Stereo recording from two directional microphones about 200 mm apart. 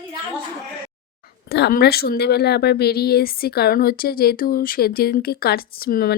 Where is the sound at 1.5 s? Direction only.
55° left (ahead or behind).